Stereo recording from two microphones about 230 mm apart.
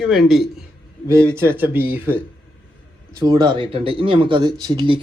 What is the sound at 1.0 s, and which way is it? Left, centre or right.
Speech, centre.